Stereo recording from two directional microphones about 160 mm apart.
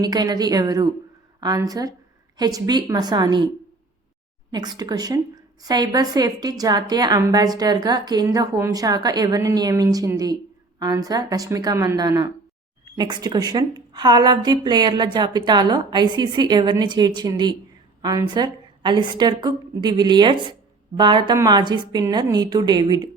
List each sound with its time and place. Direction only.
0.0 s a woman's voice: 25° right (ahead or behind)
4.5 s a woman's voice: 25° right (ahead or behind)